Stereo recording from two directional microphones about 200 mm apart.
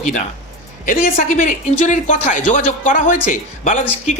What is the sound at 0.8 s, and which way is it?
Speech, 40° left (ahead or behind).